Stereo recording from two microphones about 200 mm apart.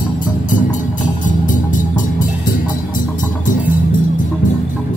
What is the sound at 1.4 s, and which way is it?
Music, 40° left (ahead or behind).